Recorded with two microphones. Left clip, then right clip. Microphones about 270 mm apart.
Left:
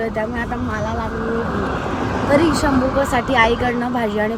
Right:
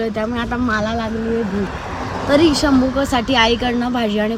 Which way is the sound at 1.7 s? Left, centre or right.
Left.